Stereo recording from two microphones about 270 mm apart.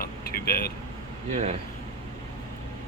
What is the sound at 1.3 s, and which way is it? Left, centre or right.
Speech, right.